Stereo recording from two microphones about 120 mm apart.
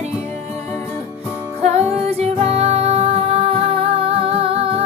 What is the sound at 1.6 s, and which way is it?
Music, 65° right (ahead or behind).